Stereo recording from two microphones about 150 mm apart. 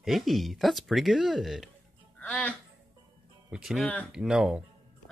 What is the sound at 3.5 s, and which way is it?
Speech, centre (ahead or behind).